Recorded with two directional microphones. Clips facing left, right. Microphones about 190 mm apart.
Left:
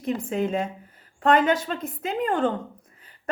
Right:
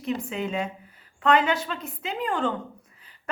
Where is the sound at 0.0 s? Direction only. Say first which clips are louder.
Left 3 dB; 45° left (ahead or behind).